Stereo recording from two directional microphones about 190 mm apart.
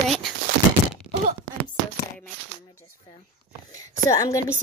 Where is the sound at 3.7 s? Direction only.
15° left (ahead or behind).